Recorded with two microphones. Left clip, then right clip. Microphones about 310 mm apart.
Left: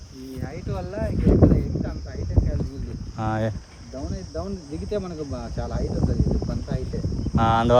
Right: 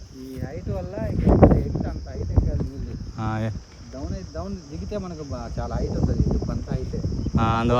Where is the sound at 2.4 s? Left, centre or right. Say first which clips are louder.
Even; centre.